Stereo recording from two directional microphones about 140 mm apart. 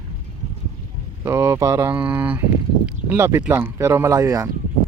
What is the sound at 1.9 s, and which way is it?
Speech, 10° right (ahead or behind).